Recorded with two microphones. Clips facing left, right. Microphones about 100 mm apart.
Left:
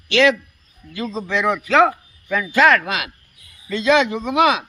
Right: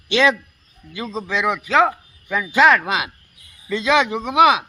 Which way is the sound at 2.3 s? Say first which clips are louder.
Even; 15° right (ahead or behind).